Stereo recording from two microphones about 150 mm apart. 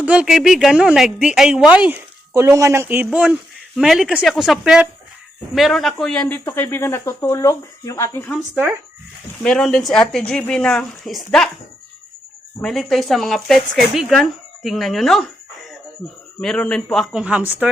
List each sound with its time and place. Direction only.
0.0 s a woman's voice: 5° right (ahead or behind); by 8.4 s 15° left (ahead or behind)
9.4 s speech: 5° left (ahead or behind)
12.6 s speech: centre (ahead or behind)
16.4 s speech: 5° left (ahead or behind); by 17.7 s 10° right (ahead or behind)